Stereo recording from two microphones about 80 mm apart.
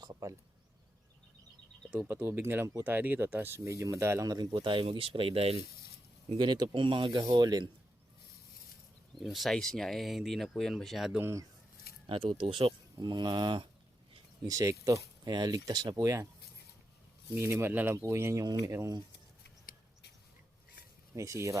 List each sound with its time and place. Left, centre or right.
0.0 s a sound: right
2.0 s speech: right
4.6 s speech: right
6.3 s speech: right
7.3 s speech: right
9.1 s speech: centre
11.2 s speech: right
12.1 s speech: right
14.4 s speech: right
15.2 s speech: right
16.0 s speech: right
17.3 s speech: right
21.2 s speech: right